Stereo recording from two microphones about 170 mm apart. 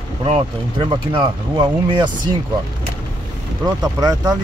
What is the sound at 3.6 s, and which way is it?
Speech, 20° right (ahead or behind).